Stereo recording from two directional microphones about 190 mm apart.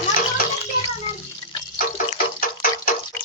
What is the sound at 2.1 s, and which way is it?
Music, 50° left (ahead or behind).